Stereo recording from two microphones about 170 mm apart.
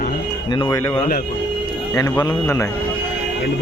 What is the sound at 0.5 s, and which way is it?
Speech, 25° left (ahead or behind).